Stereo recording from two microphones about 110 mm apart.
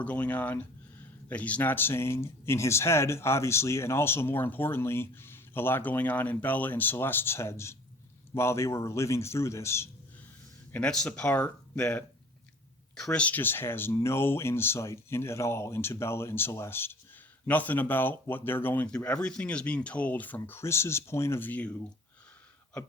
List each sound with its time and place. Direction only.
0.0 s speech: 15° left (ahead or behind)
10.7 s speech: 10° left (ahead or behind)
13.0 s speech: 10° left (ahead or behind)